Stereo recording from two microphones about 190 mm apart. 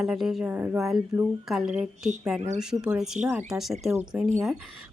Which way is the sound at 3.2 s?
15° right (ahead or behind).